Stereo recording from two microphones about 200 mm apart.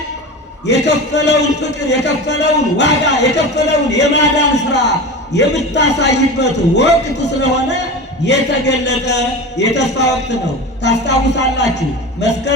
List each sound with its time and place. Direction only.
0.7 s speech: 60° left (ahead or behind)